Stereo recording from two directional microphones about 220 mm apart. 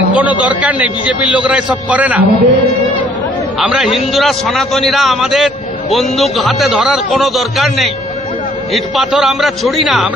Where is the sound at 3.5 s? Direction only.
Centre (ahead or behind).